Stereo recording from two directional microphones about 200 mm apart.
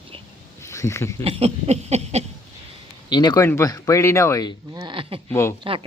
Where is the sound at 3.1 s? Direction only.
20° left (ahead or behind).